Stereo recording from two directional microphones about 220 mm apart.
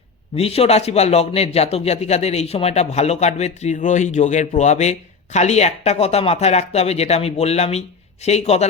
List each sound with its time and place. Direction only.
0.3 s a man's voice: 25° left (ahead or behind)